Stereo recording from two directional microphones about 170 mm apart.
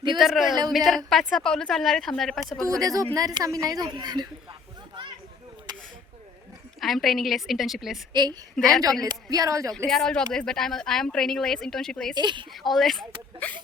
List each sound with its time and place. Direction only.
0.2 s a woman's voice: centre (ahead or behind)
2.6 s a woman's voice: 20° right (ahead or behind)
6.7 s a woman's voice: centre (ahead or behind)
8.1 s a woman's voice: 25° right (ahead or behind)
9.7 s a woman's voice: 5° left (ahead or behind)
12.1 s a woman's voice: 25° right (ahead or behind)
12.5 s a woman's voice: centre (ahead or behind)